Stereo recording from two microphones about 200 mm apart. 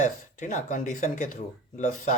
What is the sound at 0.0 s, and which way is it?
Speech, 40° left (ahead or behind).